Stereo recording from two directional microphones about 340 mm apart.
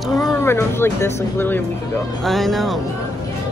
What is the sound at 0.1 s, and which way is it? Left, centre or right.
Speech, centre.